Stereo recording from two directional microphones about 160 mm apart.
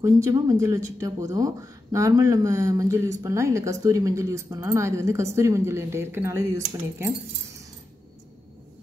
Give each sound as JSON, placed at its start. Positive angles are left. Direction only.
{"t": 0.0, "sound": "speech", "side_deg": -20}